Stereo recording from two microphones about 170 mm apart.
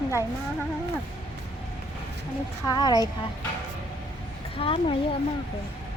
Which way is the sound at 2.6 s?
25° left (ahead or behind).